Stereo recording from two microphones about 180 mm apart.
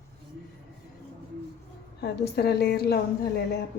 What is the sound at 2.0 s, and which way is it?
A woman's voice, 65° left (ahead or behind).